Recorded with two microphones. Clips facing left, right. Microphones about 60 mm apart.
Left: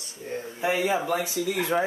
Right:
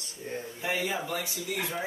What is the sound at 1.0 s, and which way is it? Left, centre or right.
Speech, left.